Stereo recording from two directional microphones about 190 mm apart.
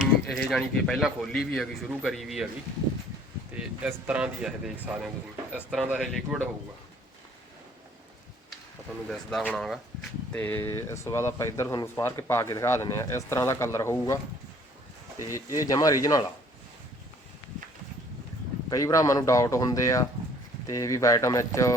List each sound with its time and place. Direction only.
0.0 s speech: centre (ahead or behind)
3.5 s speech: 10° right (ahead or behind)
9.0 s speech: centre (ahead or behind)
15.3 s speech: 15° left (ahead or behind)
18.7 s speech: 15° left (ahead or behind)